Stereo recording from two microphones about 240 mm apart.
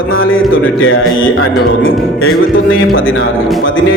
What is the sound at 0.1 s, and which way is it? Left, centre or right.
Speech, left.